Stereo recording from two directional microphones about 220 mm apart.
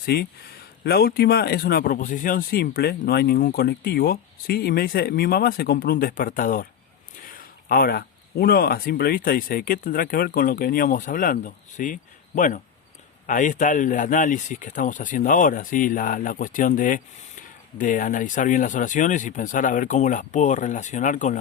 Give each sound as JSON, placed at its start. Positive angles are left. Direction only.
{"t": 0.0, "sound": "speech", "side_deg": 45}